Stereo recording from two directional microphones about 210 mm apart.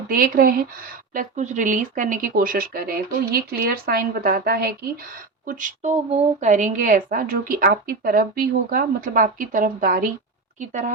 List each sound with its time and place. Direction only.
0.1 s speech: 45° right (ahead or behind)